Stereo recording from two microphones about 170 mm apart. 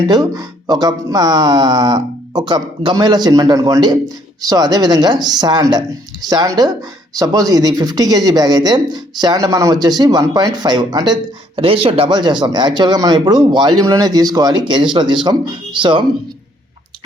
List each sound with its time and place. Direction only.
0.1 s speech: 25° right (ahead or behind)